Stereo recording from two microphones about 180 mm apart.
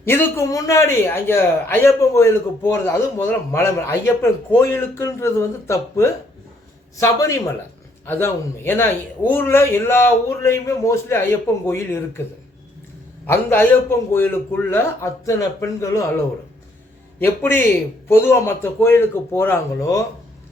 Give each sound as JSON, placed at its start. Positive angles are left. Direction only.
{"t": 0.0, "sound": "a man's voice", "side_deg": 10}
{"t": 13.2, "sound": "a man's voice", "side_deg": 10}
{"t": 17.2, "sound": "a man's voice", "side_deg": 10}